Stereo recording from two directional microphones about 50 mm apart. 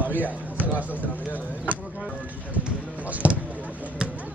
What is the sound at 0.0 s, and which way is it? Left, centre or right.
Speech, right.